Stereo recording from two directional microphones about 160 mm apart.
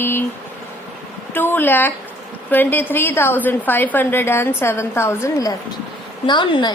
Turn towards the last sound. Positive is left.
turn(degrees=30)  # may be behind; listen again after turning